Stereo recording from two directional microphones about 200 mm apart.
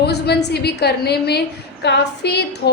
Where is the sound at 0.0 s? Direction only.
55° left (ahead or behind).